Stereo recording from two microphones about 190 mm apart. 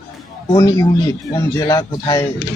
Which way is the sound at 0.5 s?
15° left (ahead or behind).